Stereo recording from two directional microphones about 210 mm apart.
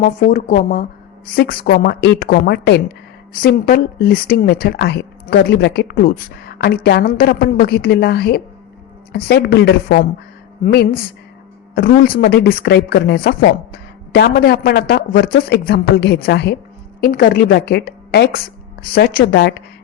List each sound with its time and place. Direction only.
0.0 s a woman's voice: 40° left (ahead or behind)